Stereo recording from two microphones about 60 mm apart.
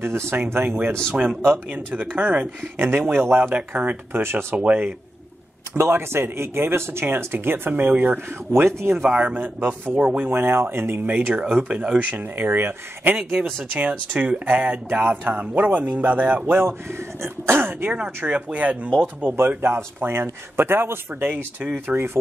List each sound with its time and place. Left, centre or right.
0.0 s speech: right
1.9 s speech: right
3.9 s speech: right
4.6 s speech: right
5.8 s speech: right
8.6 s speech: right
9.1 s speech: right
10.3 s speech: right
11.1 s speech: right
14.1 s speech: right
16.5 s speech: right
17.9 s speech: right
19.3 s speech: right